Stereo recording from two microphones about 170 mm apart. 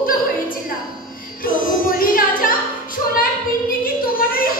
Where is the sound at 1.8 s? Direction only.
55° left (ahead or behind).